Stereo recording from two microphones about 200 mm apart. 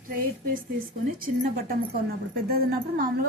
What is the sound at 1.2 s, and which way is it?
A woman's voice, 50° right (ahead or behind).